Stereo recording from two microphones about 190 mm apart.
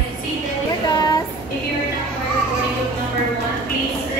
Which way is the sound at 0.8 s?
20° left (ahead or behind).